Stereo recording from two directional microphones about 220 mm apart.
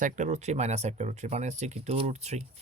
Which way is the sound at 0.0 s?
35° right (ahead or behind).